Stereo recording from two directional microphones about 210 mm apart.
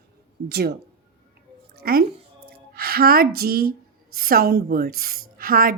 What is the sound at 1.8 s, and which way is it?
A woman's voice, 45° right (ahead or behind).